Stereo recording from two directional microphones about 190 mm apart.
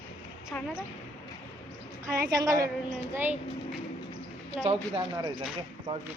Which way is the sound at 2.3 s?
20° right (ahead or behind).